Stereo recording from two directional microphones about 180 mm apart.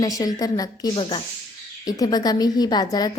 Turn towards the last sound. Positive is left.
turn(degrees=20)  # may be behind; listen again after turning